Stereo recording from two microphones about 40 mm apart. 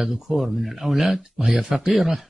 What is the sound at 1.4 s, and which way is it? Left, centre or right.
Speech, right.